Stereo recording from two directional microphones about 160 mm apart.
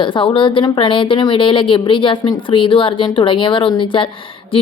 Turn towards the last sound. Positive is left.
turn(degrees=35)  # may be behind; listen again after turning